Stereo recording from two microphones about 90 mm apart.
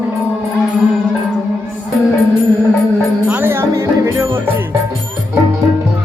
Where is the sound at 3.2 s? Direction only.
20° right (ahead or behind).